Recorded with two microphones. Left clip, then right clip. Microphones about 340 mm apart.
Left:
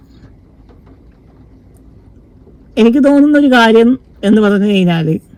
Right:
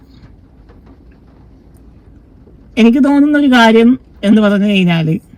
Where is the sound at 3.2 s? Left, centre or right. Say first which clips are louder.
Right 2 dB; centre.